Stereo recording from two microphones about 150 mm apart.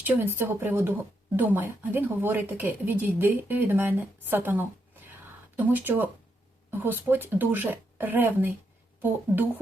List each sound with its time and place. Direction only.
0.0 s a woman's voice: 15° right (ahead or behind)
5.7 s a woman's voice: 10° right (ahead or behind)